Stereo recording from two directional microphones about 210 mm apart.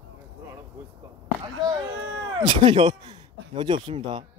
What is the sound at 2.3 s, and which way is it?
A man's voice, 20° right (ahead or behind).